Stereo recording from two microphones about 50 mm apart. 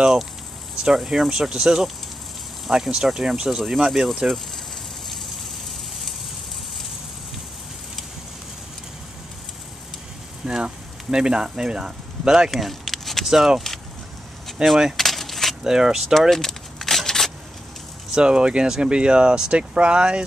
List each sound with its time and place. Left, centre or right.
0.8 s speech: centre
10.4 s a sound: centre
12.4 s a sound: centre
13.3 s speech: centre
15.0 s keys jangling: centre
15.6 s speech: centre
16.1 s vehicle: centre
18.1 s speech: centre